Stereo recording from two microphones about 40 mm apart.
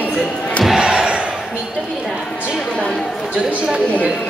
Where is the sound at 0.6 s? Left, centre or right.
Centre.